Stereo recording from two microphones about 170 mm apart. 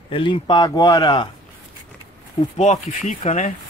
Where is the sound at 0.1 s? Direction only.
30° left (ahead or behind).